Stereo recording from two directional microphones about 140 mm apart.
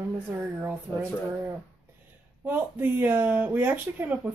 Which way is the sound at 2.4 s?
15° right (ahead or behind).